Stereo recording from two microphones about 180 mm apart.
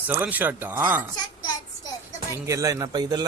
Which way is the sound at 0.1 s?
10° right (ahead or behind).